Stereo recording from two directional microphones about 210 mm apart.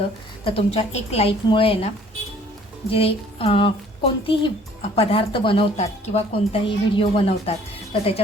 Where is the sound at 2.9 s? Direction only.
25° left (ahead or behind).